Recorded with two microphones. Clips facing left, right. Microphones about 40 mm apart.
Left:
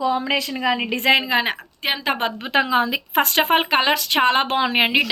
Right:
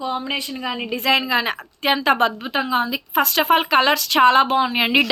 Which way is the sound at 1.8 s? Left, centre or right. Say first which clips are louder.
Right 5 dB; centre.